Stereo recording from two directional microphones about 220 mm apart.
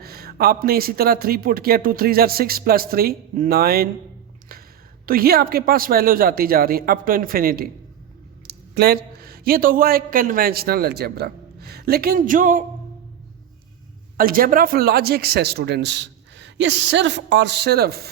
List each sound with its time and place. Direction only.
0.0 s a man's voice: 45° right (ahead or behind)
5.0 s a man's voice: 40° right (ahead or behind)
14.2 s a man's voice: 40° right (ahead or behind)